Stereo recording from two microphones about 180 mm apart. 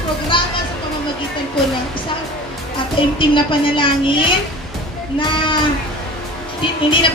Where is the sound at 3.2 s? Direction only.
30° left (ahead or behind).